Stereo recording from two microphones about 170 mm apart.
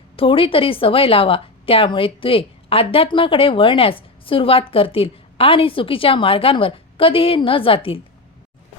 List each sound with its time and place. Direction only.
0.2 s a woman's voice: 30° left (ahead or behind)